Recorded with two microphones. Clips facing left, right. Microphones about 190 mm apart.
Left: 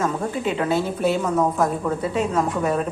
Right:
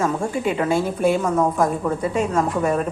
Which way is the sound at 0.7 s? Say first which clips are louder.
Right 3 dB; 50° right (ahead or behind).